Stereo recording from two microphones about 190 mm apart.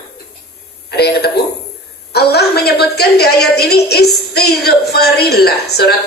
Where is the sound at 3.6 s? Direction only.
60° left (ahead or behind).